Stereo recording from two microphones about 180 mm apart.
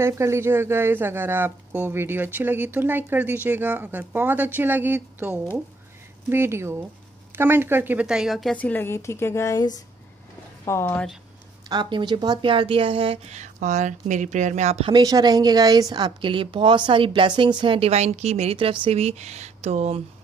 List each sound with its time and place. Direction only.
0.0 s a woman's voice: 15° right (ahead or behind); by 11.1 s 15° left (ahead or behind)
11.7 s speech: 25° right (ahead or behind)